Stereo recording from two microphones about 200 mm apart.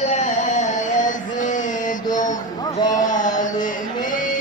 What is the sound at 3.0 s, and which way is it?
Mantra, 40° left (ahead or behind).